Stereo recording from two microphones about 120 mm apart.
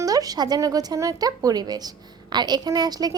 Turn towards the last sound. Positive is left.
turn(degrees=-35)  # may be behind; listen again after turning